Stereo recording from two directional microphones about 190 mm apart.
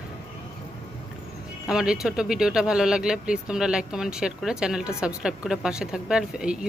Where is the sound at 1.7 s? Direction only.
5° right (ahead or behind).